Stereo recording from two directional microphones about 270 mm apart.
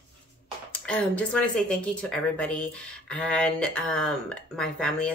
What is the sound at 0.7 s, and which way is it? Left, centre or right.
Speech, centre.